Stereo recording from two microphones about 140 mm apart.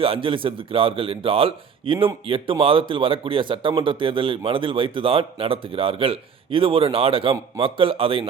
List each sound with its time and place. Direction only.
0.0 s speech: 40° right (ahead or behind)